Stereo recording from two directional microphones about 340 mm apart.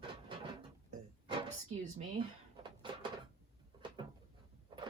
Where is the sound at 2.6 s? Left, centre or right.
Centre.